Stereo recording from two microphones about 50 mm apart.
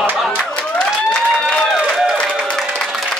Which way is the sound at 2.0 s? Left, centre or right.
Centre.